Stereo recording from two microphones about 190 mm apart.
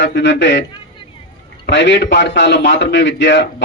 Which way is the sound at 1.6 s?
65° left (ahead or behind).